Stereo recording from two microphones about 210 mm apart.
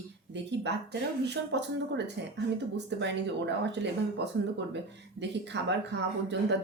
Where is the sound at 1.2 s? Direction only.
55° right (ahead or behind).